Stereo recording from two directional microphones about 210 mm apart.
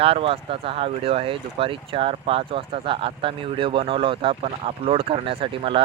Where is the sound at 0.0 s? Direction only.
25° right (ahead or behind).